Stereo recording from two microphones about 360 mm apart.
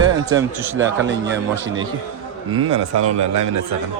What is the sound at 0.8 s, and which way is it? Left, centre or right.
Speech, right.